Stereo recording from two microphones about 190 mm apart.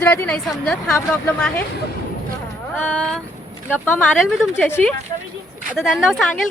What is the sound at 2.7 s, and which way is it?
A woman's voice, 10° left (ahead or behind).